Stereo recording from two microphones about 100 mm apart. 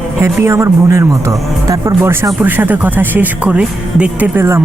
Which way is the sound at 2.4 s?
15° right (ahead or behind).